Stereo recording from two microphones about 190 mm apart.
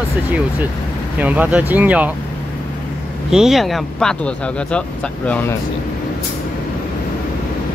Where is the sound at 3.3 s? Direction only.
Centre (ahead or behind).